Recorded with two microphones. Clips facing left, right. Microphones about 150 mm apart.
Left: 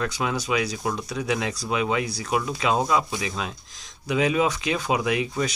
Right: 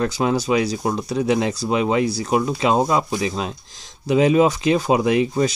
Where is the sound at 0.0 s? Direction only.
30° right (ahead or behind).